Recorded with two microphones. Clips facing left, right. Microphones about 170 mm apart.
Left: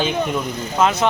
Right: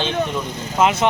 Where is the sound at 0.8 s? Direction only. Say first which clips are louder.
Right 1 dB; 20° right (ahead or behind).